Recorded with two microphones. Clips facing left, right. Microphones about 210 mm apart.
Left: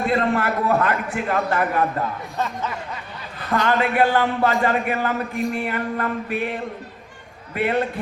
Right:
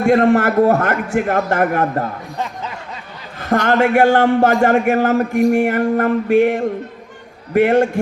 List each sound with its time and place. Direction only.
0.0 s a man's voice: 45° right (ahead or behind)
3.4 s a man's voice: 45° right (ahead or behind)